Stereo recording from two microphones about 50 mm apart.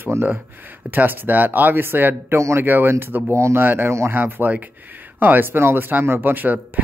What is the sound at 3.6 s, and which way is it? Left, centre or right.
Speech, right.